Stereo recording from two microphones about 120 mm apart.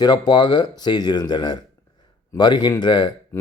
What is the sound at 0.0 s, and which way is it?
Speech, 35° left (ahead or behind).